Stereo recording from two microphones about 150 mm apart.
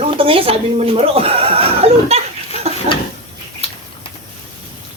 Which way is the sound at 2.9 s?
45° right (ahead or behind).